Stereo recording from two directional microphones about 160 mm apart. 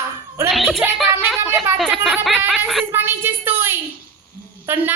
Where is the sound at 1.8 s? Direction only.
Centre (ahead or behind).